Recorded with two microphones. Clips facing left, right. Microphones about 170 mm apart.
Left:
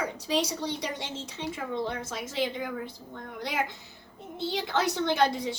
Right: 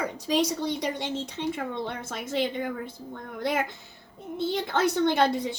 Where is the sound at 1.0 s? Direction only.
60° right (ahead or behind).